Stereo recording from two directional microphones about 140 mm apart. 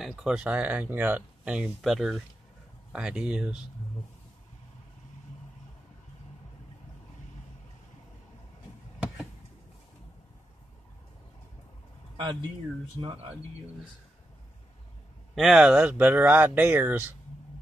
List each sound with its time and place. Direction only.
0.0 s speech: 5° right (ahead or behind)
9.0 s a sound: centre (ahead or behind)
12.2 s speech: 30° right (ahead or behind)
15.3 s speech: centre (ahead or behind)